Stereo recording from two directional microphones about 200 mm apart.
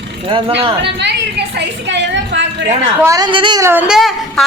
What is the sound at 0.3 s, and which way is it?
Speech, 25° right (ahead or behind).